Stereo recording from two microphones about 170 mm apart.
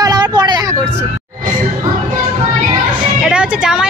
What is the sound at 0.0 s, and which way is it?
Vehicle, 25° right (ahead or behind).